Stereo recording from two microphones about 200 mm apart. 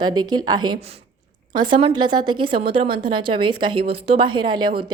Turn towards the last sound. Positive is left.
turn(degrees=-25)  # may be behind; listen again after turning